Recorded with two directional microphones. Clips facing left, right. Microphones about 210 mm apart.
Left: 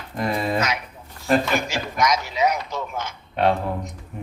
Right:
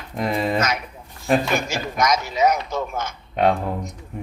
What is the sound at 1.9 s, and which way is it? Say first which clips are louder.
Speech: right 1 dB; 45° right (ahead or behind).